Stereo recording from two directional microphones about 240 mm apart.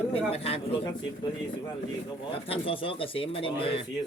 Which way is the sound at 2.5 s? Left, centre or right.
Left.